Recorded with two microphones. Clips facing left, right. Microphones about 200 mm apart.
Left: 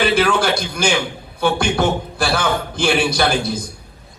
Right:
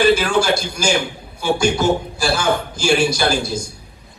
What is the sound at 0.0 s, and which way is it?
A man's voice, 55° left (ahead or behind).